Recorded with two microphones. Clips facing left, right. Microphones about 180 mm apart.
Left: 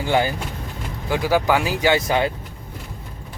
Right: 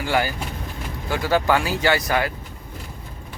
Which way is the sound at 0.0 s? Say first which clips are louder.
Left 2 dB; 20° left (ahead or behind).